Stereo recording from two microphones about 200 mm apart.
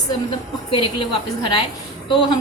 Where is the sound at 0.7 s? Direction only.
25° left (ahead or behind).